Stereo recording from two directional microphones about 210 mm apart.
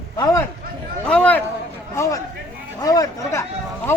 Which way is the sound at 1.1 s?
5° left (ahead or behind).